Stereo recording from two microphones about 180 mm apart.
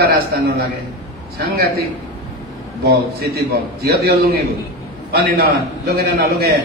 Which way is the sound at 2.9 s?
60° right (ahead or behind).